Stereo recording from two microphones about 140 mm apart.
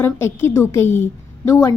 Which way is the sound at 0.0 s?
20° left (ahead or behind).